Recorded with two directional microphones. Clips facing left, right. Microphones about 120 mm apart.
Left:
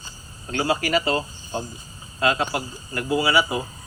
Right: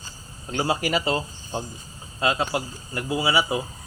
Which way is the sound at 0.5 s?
20° right (ahead or behind).